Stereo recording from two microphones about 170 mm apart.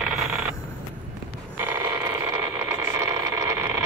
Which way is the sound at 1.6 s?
15° right (ahead or behind).